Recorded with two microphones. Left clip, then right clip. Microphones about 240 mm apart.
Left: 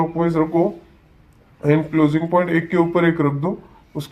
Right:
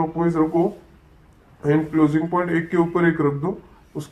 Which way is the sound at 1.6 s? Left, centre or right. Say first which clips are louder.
Left 2 dB; left.